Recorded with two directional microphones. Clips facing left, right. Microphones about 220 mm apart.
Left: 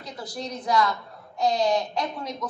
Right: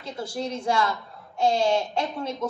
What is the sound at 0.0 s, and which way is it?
A woman's voice, 25° right (ahead or behind).